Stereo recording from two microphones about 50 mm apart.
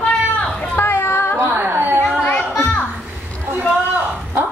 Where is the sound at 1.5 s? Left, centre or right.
Right.